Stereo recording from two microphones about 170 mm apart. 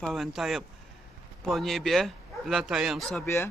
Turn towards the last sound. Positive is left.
turn(degrees=15)  # may be behind; listen again after turning